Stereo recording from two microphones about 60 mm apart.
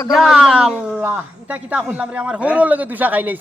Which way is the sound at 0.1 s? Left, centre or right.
Centre.